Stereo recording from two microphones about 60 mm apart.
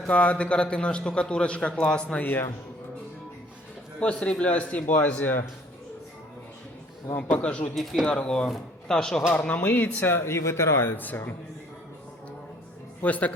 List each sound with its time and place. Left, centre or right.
0.1 s a man's voice: left
2.1 s speech: left
4.0 s a man's voice: centre
7.2 s a man's voice: left
7.8 s speech: centre
9.6 s speech: left
10.2 s speech: left
13.0 s a man's voice: left